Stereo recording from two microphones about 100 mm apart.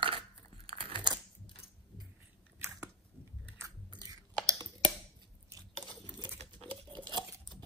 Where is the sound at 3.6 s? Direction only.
35° right (ahead or behind).